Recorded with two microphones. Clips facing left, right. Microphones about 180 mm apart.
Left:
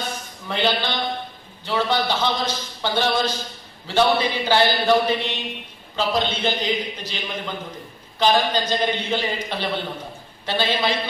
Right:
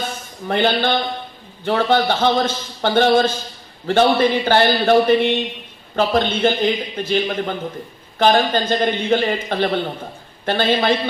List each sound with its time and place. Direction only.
0.5 s a man's voice: 55° right (ahead or behind)